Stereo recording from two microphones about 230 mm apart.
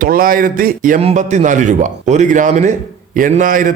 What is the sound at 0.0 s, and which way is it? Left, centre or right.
A man's voice, right.